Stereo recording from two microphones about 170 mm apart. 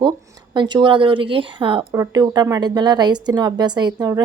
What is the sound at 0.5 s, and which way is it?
A woman's voice, 25° right (ahead or behind).